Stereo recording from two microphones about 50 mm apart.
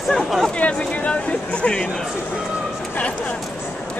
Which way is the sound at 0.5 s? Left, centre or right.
Left.